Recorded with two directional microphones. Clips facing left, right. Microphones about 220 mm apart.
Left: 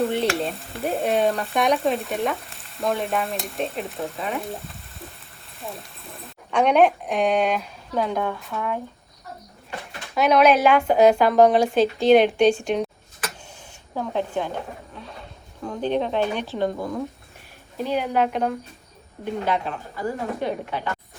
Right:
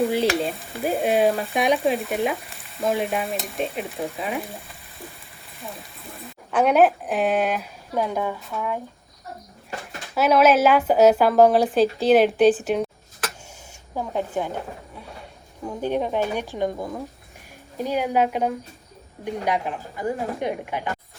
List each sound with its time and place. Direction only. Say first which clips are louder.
0.0 s stir: right 2 dB; centre (ahead or behind)
5.5 s speech: left 2 dB; centre (ahead or behind)
10.2 s stir: even; 5° right (ahead or behind)
13.9 s speech: even; 10° right (ahead or behind)
15.6 s speech: left 1 dB; 10° right (ahead or behind)
17.8 s speech: right 1 dB; 10° right (ahead or behind)